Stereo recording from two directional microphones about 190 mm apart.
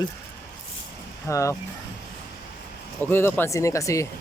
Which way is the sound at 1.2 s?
15° left (ahead or behind).